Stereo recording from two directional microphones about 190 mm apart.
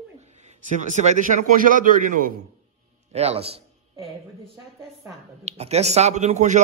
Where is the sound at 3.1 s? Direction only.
35° right (ahead or behind).